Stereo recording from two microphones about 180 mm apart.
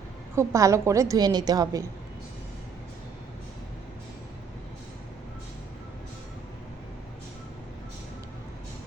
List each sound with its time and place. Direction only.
0.3 s a woman's voice: 15° right (ahead or behind)